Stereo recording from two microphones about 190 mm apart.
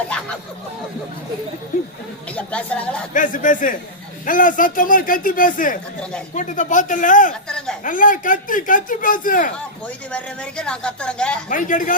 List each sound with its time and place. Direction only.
2.3 s speech: 5° left (ahead or behind)
3.1 s speech: 45° left (ahead or behind)
7.4 s speech: 5° left (ahead or behind)
7.9 s speech: 45° left (ahead or behind)
10.1 s speech: 5° left (ahead or behind)
11.4 s speech: 45° left (ahead or behind)